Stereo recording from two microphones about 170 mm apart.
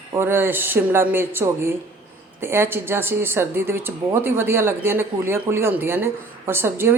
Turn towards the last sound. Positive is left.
turn(degrees=-15)  # may be behind; listen again after turning